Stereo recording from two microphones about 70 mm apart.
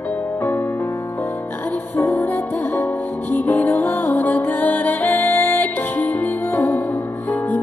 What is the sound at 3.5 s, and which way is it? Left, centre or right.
Music, left.